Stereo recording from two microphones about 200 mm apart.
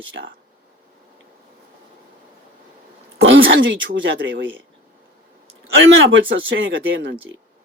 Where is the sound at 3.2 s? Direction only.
75° right (ahead or behind).